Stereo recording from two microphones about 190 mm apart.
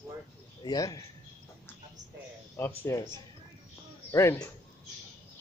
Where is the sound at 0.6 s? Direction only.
20° left (ahead or behind).